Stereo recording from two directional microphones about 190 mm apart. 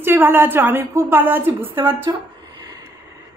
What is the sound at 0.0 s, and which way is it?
Speech, 10° right (ahead or behind).